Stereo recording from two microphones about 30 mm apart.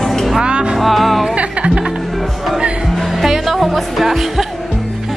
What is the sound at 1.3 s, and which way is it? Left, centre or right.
Music, right.